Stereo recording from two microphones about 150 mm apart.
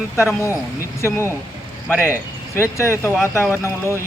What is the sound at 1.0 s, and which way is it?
Speech, 20° left (ahead or behind).